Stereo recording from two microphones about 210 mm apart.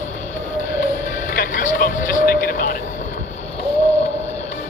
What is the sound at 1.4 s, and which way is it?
Music, 40° left (ahead or behind).